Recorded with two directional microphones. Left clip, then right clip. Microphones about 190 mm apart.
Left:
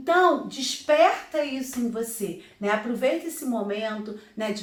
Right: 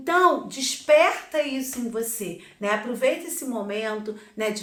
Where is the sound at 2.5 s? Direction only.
35° right (ahead or behind).